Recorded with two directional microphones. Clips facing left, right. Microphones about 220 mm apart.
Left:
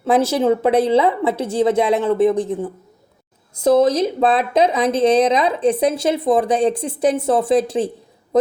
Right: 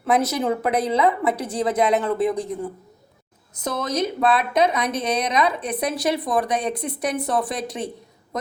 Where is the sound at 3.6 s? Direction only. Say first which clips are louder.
Left 10 dB; 30° left (ahead or behind).